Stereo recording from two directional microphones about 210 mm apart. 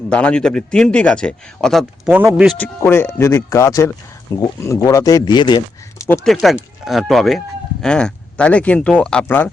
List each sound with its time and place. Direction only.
0.1 s speech: 5° left (ahead or behind)
2.6 s speech: 10° left (ahead or behind)
6.2 s speech: centre (ahead or behind)